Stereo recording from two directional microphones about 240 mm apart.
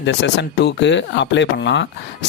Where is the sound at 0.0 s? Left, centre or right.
Left.